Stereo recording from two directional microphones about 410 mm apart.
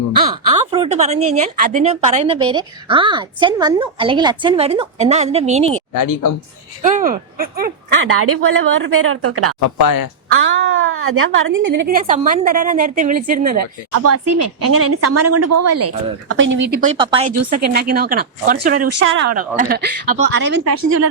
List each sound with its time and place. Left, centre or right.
0.4 s speech: centre
5.9 s speech: left
6.8 s a woman's voice: centre
9.7 s speech: left
10.3 s a woman's voice: right
13.9 s a woman's voice: right
16.6 s a woman's voice: right
20.7 s a woman's voice: right